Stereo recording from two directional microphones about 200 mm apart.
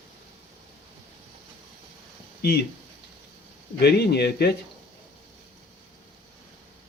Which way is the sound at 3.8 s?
55° left (ahead or behind).